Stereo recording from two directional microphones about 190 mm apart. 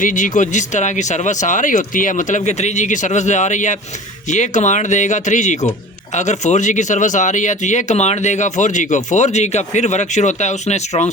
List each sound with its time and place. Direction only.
0.0 s speech: 40° left (ahead or behind)